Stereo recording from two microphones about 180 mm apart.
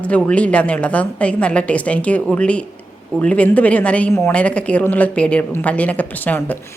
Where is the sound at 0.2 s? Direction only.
5° left (ahead or behind).